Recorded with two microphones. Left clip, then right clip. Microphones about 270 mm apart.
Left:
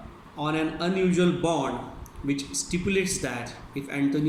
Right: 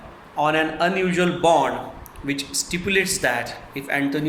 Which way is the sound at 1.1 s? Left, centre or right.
Centre.